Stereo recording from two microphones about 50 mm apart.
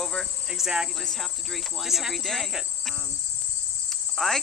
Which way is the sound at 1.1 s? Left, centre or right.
Centre.